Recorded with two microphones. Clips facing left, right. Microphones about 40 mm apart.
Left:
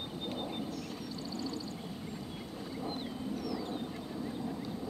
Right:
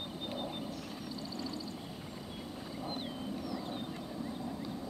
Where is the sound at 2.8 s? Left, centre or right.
Centre.